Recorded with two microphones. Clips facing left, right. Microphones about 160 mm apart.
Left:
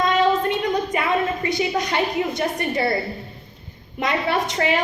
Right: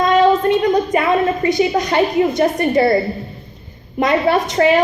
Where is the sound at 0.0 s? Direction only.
45° right (ahead or behind).